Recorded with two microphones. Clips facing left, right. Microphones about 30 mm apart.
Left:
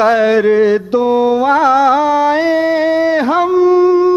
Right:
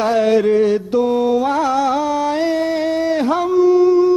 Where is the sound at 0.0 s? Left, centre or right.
Left.